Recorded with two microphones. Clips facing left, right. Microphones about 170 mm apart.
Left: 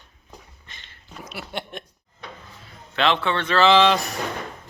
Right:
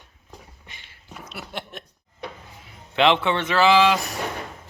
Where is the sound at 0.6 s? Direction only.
10° right (ahead or behind).